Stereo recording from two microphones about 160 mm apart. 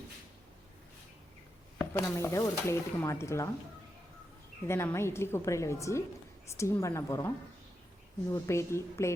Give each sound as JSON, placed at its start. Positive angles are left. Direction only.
{"t": 1.9, "sound": "speech", "side_deg": 15}
{"t": 4.7, "sound": "speech", "side_deg": 15}